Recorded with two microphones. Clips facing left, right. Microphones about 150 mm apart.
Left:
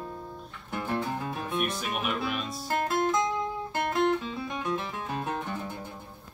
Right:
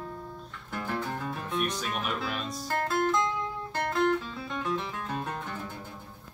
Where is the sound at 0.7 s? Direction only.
20° left (ahead or behind).